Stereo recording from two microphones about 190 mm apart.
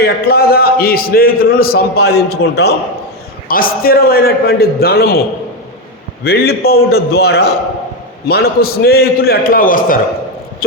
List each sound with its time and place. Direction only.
0.0 s a man's voice: 55° left (ahead or behind)
6.2 s a man's voice: 55° left (ahead or behind)
10.6 s a sound: 50° left (ahead or behind)